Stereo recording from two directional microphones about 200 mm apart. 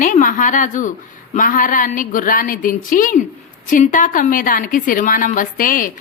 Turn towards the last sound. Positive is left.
turn(degrees=45)  # may be behind; listen again after turning